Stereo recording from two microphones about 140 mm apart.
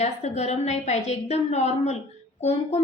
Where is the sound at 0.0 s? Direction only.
55° left (ahead or behind).